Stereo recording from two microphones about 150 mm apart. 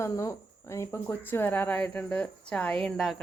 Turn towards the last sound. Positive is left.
turn(degrees=0)  # may be behind; listen again after turning